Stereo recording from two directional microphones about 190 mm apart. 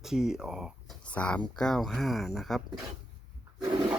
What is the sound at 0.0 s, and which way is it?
Speech, 5° right (ahead or behind).